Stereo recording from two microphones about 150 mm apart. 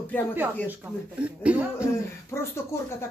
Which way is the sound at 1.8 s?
20° left (ahead or behind).